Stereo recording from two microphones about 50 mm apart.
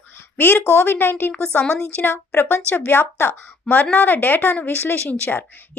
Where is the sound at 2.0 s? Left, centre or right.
Left.